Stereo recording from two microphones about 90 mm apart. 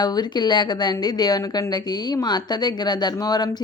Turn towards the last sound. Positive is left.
turn(degrees=50)  # may be behind; listen again after turning